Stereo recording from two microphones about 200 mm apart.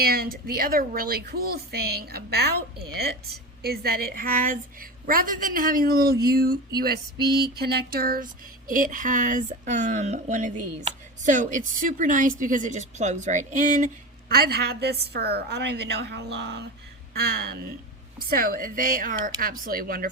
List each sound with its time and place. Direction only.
0.0 s speech: 50° right (ahead or behind)